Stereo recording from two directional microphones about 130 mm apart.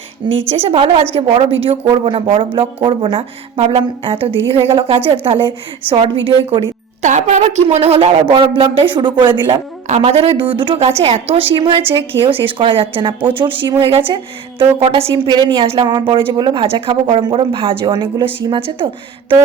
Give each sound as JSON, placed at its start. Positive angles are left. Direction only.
{"t": 0.5, "sound": "a woman's voice", "side_deg": -50}
{"t": 7.0, "sound": "a woman's voice", "side_deg": -65}
{"t": 9.8, "sound": "a woman's voice", "side_deg": -55}